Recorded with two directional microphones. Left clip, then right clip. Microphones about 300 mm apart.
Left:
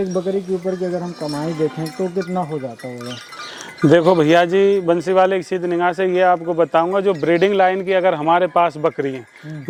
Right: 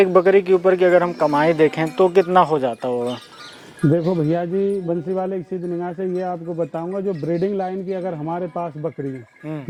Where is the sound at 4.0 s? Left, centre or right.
Centre.